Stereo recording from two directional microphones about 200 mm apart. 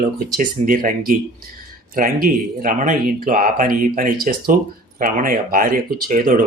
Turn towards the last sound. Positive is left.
turn(degrees=-45)  # may be behind; listen again after turning